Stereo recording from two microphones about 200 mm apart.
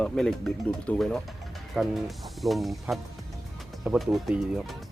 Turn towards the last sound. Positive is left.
turn(degrees=0)  # may be behind; listen again after turning